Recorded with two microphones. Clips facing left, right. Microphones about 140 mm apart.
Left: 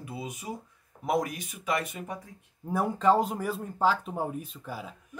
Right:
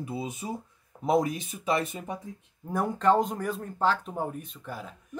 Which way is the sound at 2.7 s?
5° left (ahead or behind).